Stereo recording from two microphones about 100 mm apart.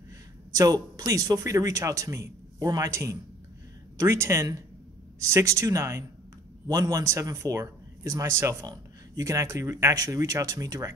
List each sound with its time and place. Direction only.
0.5 s a woman's voice: 35° right (ahead or behind)